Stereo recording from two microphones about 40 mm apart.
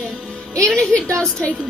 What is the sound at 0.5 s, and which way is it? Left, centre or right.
Speech, left.